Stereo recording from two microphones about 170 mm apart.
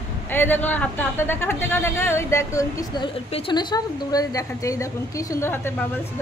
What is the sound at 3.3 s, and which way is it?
Speech, 35° left (ahead or behind).